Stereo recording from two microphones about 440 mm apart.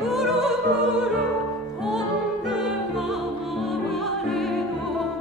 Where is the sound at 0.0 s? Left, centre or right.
Centre.